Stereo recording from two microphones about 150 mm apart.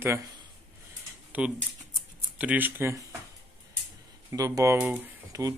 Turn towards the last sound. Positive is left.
turn(degrees=-20)  # may be behind; listen again after turning